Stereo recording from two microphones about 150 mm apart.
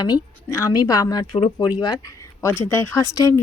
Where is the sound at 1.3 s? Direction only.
35° left (ahead or behind); by 3.3 s 20° left (ahead or behind).